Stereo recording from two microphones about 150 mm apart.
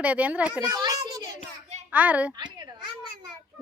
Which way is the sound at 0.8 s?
30° right (ahead or behind).